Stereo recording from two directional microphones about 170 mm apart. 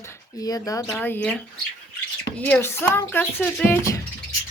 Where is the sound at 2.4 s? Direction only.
10° left (ahead or behind).